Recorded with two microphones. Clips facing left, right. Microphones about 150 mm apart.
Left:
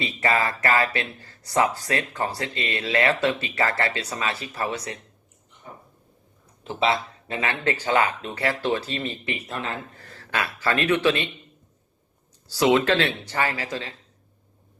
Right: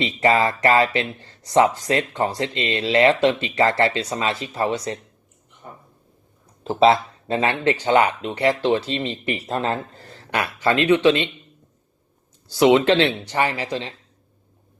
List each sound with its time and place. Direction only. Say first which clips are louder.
0.0 s speech: right 5 dB; 25° right (ahead or behind)
6.7 s speech: right 8 dB; 35° right (ahead or behind)
12.5 s speech: right 4 dB; 20° right (ahead or behind)